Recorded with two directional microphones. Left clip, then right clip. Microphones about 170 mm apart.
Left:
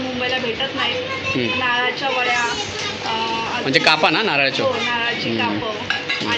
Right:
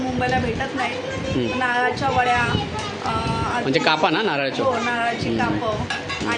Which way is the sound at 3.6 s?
10° right (ahead or behind).